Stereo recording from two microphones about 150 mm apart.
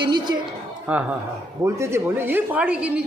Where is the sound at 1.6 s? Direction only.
20° right (ahead or behind).